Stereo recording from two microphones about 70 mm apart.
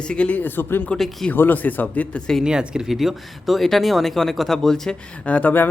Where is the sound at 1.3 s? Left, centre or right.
Left.